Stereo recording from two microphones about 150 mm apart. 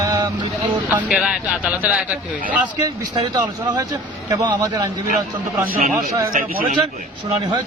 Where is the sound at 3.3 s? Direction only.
30° right (ahead or behind).